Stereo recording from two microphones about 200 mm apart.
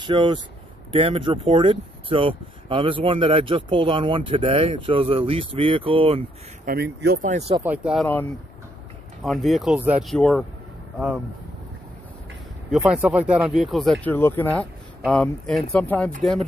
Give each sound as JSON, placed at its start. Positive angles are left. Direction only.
{"t": 0.0, "sound": "speech", "side_deg": -25}
{"t": 6.6, "sound": "speech", "side_deg": -50}
{"t": 7.6, "sound": "speech", "side_deg": -5}
{"t": 9.2, "sound": "speech", "side_deg": 0}
{"t": 12.7, "sound": "speech", "side_deg": -5}